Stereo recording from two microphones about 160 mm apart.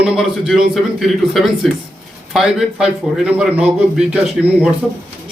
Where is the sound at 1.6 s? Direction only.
Centre (ahead or behind).